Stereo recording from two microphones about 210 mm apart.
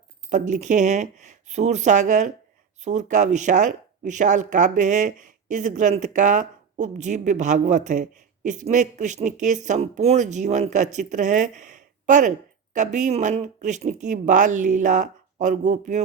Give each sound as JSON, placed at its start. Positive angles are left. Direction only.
{"t": 0.3, "sound": "speech", "side_deg": -35}